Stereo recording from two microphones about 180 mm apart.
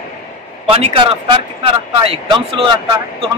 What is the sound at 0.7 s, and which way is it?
Speech, 30° right (ahead or behind).